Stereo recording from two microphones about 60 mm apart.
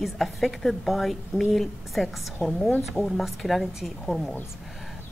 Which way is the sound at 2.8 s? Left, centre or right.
Centre.